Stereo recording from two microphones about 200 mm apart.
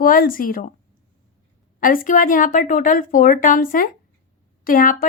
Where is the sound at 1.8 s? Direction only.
45° left (ahead or behind).